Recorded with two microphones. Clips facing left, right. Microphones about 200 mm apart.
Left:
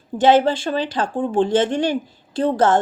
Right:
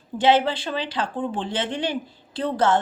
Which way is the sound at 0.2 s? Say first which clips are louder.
Left 4 dB; 50° left (ahead or behind).